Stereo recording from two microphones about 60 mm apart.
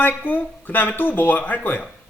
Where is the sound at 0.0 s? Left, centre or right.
Left.